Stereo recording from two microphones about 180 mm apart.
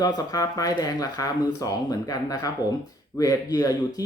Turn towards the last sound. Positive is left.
turn(degrees=20)  # may be behind; listen again after turning